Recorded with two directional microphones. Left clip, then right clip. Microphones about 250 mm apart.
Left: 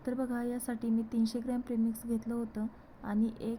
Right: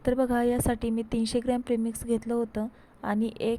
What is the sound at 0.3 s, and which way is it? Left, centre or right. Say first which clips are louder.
A woman's voice: right 11 dB; right.